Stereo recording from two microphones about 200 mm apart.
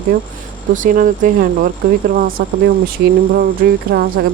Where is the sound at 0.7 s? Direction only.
40° right (ahead or behind).